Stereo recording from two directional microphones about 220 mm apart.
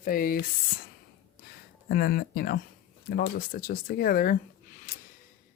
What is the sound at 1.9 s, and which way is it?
Speech, 45° left (ahead or behind).